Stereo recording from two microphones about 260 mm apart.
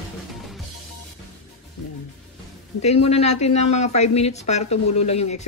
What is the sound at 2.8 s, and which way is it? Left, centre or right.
Speech, left.